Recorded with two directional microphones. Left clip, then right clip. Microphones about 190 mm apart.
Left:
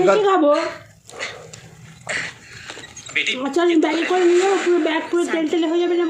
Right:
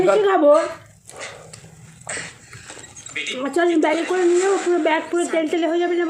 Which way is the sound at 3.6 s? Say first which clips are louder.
Left 1 dB; 50° left (ahead or behind).